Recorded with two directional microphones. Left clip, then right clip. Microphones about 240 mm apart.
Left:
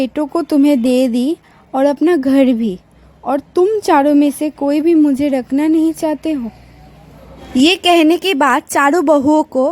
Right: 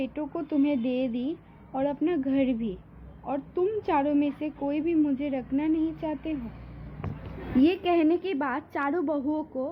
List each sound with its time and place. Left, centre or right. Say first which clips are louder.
0.0 s a woman's voice: left 15 dB; left
7.6 s a woman's voice: left 13 dB; left